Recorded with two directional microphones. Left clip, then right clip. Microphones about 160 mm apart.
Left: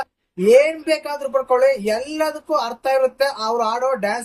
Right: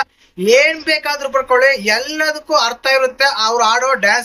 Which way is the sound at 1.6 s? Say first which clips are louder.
Right 5 dB; 15° left (ahead or behind).